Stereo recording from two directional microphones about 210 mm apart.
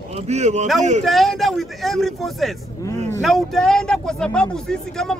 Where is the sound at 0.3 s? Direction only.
35° right (ahead or behind).